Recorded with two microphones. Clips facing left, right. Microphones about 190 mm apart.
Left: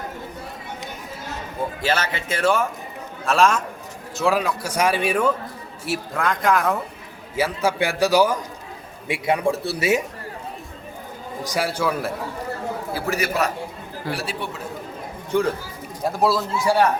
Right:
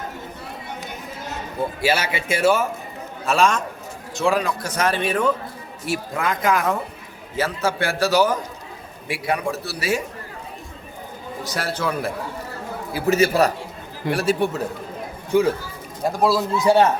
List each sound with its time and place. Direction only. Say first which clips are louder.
1.8 s a man's voice: right 2 dB; 10° right (ahead or behind)
7.3 s a man's voice: left 1 dB; 15° left (ahead or behind)
9.0 s a man's voice: left 3 dB; 25° left (ahead or behind)
11.4 s a man's voice: left 2 dB; 10° left (ahead or behind)
12.9 s a man's voice: right 8 dB; 20° right (ahead or behind)
14.1 s speech: right 9 dB; 45° right (ahead or behind)
15.3 s speech: right 3 dB; 5° right (ahead or behind)
16.6 s a man's voice: right 4 dB; 20° right (ahead or behind)